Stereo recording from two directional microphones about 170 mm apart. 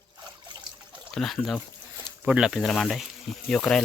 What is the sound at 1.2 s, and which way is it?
Speech, centre (ahead or behind).